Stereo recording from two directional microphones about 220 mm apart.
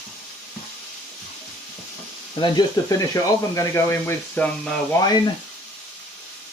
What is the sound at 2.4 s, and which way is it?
Speech, 15° left (ahead or behind).